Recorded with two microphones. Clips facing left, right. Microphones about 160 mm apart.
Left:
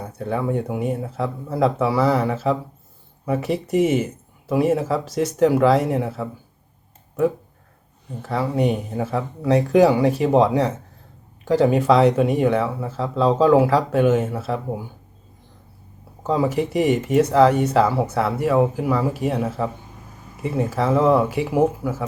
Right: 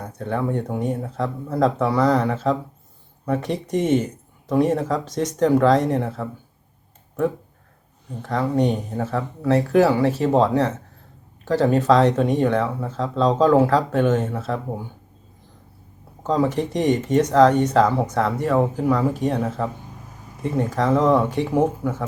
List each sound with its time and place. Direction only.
0.0 s speech: 10° left (ahead or behind)
8.2 s speech: 5° left (ahead or behind)
16.2 s speech: 10° left (ahead or behind)